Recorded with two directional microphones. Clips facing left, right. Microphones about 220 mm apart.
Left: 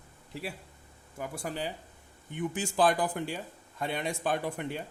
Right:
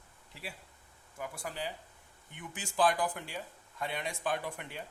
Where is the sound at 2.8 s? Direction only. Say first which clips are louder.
Left 3 dB; 30° left (ahead or behind).